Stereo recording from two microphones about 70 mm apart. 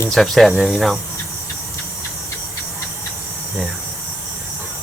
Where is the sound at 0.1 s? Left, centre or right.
Centre.